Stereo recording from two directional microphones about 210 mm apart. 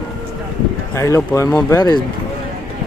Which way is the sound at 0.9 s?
15° left (ahead or behind).